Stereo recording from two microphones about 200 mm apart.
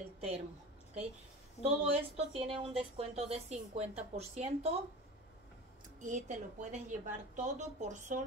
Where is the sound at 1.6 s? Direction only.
30° right (ahead or behind).